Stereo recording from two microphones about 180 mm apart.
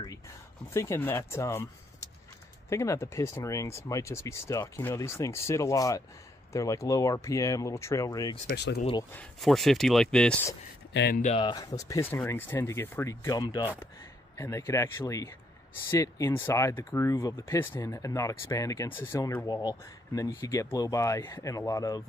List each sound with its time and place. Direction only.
0.7 s speech: 15° left (ahead or behind)
8.5 s speech: 65° left (ahead or behind)
9.1 s speech: 5° left (ahead or behind)
10.9 s speech: 75° left (ahead or behind)
11.3 s speech: 20° left (ahead or behind)